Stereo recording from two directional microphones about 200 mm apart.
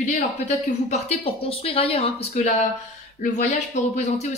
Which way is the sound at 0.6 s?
35° left (ahead or behind).